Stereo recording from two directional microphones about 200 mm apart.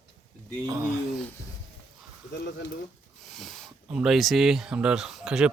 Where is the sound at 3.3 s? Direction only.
Centre (ahead or behind).